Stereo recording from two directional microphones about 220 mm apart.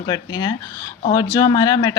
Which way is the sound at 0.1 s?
20° left (ahead or behind).